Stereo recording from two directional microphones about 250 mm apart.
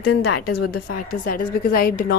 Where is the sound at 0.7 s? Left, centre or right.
Left.